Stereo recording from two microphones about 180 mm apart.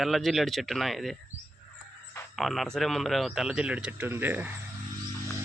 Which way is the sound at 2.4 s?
Centre (ahead or behind).